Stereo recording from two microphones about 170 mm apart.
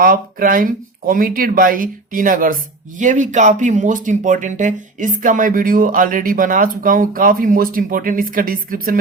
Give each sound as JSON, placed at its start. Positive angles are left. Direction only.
{"t": 0.0, "sound": "speech", "side_deg": -55}